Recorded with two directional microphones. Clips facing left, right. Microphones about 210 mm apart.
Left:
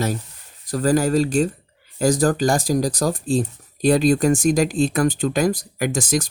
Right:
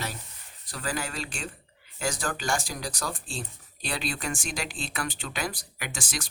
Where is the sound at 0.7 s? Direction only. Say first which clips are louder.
Left 16 dB; 40° left (ahead or behind).